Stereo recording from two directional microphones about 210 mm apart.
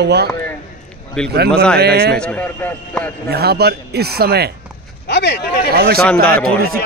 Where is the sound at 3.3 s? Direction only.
50° right (ahead or behind).